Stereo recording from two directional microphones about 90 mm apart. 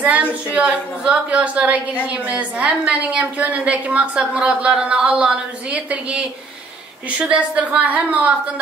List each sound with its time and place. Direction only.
0.0 s a woman's voice: 15° right (ahead or behind)